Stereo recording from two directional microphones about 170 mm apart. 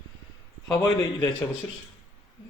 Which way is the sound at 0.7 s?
20° left (ahead or behind).